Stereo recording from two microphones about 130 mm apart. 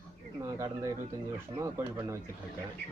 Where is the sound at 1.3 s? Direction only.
15° right (ahead or behind).